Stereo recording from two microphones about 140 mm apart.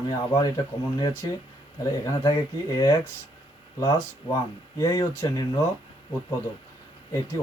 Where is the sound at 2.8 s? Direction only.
20° left (ahead or behind).